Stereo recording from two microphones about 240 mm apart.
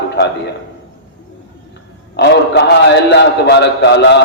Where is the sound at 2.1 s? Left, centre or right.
Left.